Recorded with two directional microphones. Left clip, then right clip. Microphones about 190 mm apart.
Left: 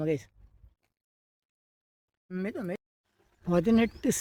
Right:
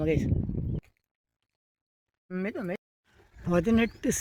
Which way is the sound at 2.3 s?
20° right (ahead or behind).